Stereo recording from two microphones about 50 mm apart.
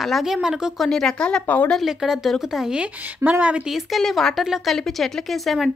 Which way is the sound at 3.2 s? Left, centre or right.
Right.